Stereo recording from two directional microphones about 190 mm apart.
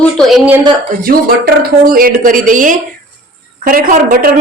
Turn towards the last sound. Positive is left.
turn(degrees=-45)  # may be behind; listen again after turning